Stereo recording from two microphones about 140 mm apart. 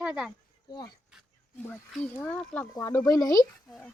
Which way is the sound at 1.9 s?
5° left (ahead or behind).